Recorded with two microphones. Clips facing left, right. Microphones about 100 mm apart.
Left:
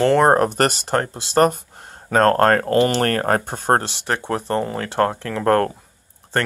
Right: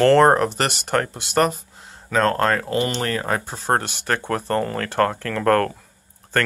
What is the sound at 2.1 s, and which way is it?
Speech, 45° left (ahead or behind).